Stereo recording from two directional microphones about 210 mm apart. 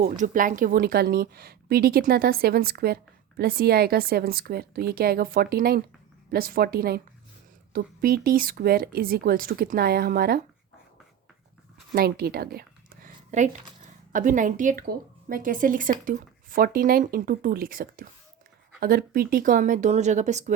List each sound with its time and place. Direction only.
0.0 s a woman's voice: 40° right (ahead or behind)
11.9 s a woman's voice: 45° right (ahead or behind)